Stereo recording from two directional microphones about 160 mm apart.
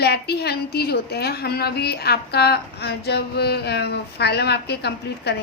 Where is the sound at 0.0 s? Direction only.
90° left.